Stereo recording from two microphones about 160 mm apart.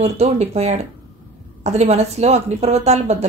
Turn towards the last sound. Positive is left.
turn(degrees=-45)  # may be behind; listen again after turning